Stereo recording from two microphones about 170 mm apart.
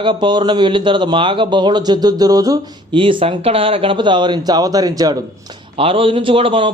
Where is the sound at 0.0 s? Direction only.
30° right (ahead or behind).